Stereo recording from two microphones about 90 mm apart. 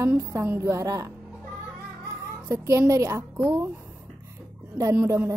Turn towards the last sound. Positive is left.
turn(degrees=-30)  # may be behind; listen again after turning